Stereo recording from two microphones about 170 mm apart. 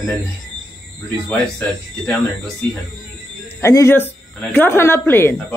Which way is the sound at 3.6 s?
15° left (ahead or behind).